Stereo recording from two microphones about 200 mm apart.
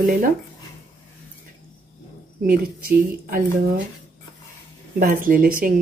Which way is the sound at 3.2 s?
45° right (ahead or behind).